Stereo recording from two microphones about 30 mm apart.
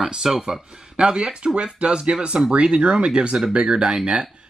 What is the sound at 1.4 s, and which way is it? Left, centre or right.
Speech, right.